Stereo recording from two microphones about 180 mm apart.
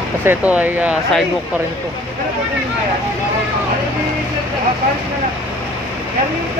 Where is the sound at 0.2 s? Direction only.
10° right (ahead or behind).